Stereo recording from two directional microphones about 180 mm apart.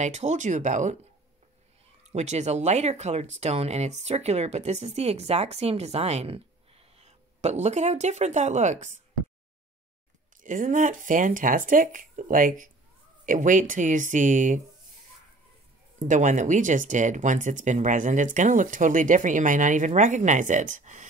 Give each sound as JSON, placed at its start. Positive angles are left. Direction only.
{"t": 0.0, "sound": "speech", "side_deg": -40}
{"t": 2.1, "sound": "speech", "side_deg": -40}
{"t": 10.4, "sound": "speech", "side_deg": -45}
{"t": 16.0, "sound": "speech", "side_deg": -45}